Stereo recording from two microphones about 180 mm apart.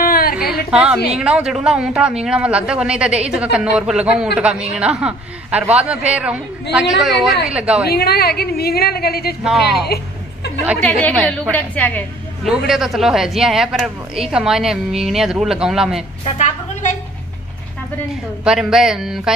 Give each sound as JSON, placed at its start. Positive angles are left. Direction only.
{"t": 0.0, "sound": "a sound", "side_deg": 55}
{"t": 0.7, "sound": "a woman's voice", "side_deg": -5}
{"t": 7.8, "sound": "a woman's voice", "side_deg": 60}
{"t": 9.4, "sound": "a woman's voice", "side_deg": 0}
{"t": 10.8, "sound": "a woman's voice", "side_deg": 10}
{"t": 12.4, "sound": "a woman's voice", "side_deg": 0}
{"t": 16.3, "sound": "a woman's voice", "side_deg": 40}
{"t": 18.4, "sound": "a woman's voice", "side_deg": -5}